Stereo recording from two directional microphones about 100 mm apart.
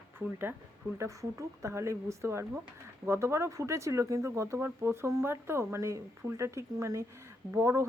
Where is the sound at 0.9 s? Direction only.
30° right (ahead or behind).